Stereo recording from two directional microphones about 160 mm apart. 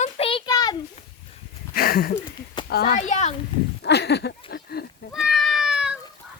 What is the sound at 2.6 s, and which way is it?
Speech, 75° left (ahead or behind).